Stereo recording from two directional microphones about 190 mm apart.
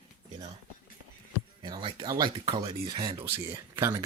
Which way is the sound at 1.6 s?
25° right (ahead or behind).